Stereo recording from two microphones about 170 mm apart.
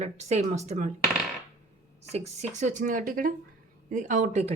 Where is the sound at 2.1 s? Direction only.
40° right (ahead or behind).